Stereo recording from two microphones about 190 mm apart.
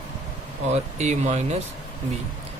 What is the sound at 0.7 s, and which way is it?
Speech, 35° right (ahead or behind).